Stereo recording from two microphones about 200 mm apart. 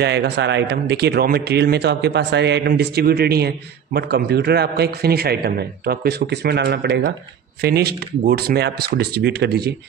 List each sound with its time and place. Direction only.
0.0 s speech: 55° right (ahead or behind)